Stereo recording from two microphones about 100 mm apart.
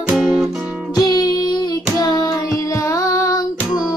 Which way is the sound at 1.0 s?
40° left (ahead or behind).